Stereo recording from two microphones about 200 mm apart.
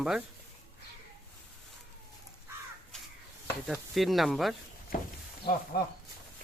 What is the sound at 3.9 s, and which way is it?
Speech, centre (ahead or behind).